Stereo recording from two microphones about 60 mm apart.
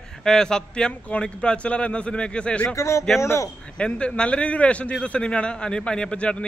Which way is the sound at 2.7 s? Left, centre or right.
Left.